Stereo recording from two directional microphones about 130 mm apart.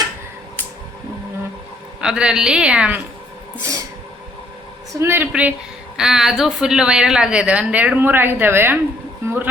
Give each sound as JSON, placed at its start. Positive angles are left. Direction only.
{"t": 2.0, "sound": "a woman's voice", "side_deg": -5}
{"t": 4.9, "sound": "a woman's voice", "side_deg": -15}